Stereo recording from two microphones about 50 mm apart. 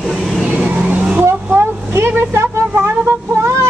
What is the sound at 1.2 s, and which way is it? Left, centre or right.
Vehicle, right.